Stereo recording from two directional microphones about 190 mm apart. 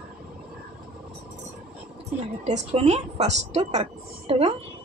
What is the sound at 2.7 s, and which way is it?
A woman's voice, 35° right (ahead or behind).